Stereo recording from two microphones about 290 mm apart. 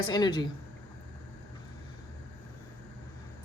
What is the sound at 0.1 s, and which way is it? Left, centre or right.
Speech, centre.